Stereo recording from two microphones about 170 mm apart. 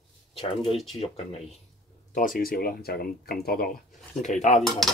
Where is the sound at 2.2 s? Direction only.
55° left (ahead or behind).